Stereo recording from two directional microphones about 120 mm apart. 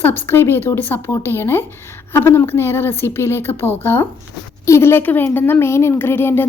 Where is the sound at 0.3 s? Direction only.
20° left (ahead or behind).